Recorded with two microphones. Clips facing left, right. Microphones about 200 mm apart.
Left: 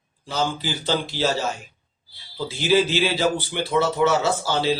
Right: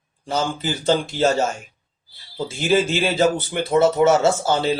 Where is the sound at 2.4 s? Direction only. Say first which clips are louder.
Even; 50° right (ahead or behind).